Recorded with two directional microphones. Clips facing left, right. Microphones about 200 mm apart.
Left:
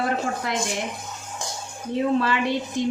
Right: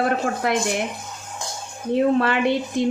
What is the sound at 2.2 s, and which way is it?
Speech, 60° right (ahead or behind).